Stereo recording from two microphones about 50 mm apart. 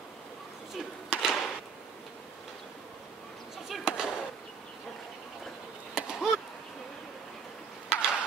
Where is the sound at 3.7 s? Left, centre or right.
Centre.